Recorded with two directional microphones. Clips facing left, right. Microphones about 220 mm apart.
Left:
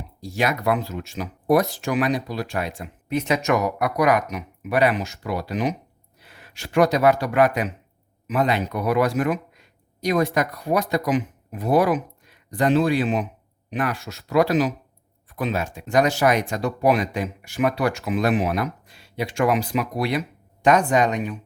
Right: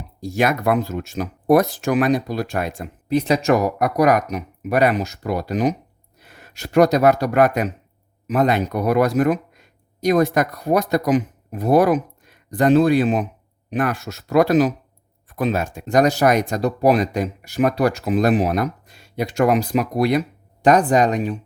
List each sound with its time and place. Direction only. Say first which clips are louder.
0.2 s speech: right 4 dB; 50° right (ahead or behind)